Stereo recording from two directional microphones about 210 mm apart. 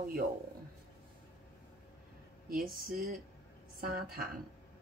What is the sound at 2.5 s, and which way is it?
A woman's voice, 40° right (ahead or behind).